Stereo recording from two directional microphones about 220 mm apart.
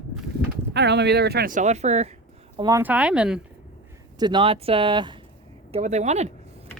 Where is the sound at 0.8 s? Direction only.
50° right (ahead or behind); by 2.1 s 30° right (ahead or behind).